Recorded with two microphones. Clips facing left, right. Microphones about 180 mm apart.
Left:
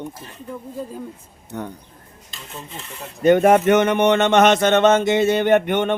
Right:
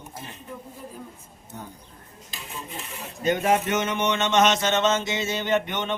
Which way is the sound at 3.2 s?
55° left (ahead or behind).